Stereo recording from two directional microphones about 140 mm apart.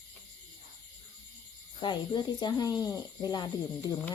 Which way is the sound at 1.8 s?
30° left (ahead or behind).